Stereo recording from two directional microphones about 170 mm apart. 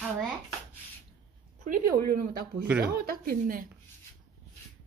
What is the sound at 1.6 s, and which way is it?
Speech, 55° right (ahead or behind).